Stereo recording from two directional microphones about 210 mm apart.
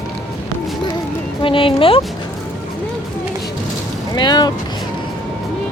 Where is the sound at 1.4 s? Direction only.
25° left (ahead or behind).